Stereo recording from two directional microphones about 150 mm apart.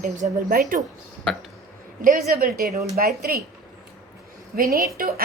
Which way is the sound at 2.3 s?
75° right (ahead or behind).